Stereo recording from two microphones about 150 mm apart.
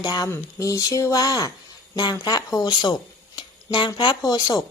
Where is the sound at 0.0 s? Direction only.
25° left (ahead or behind).